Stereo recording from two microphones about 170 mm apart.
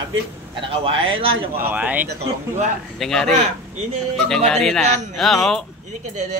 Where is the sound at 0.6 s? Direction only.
30° right (ahead or behind).